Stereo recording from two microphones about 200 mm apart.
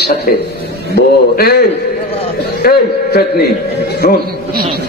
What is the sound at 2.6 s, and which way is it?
Speech, 50° left (ahead or behind).